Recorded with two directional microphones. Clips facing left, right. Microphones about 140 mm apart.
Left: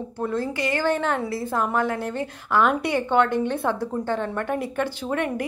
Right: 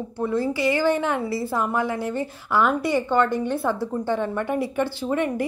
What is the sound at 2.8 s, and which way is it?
Speech, 55° left (ahead or behind).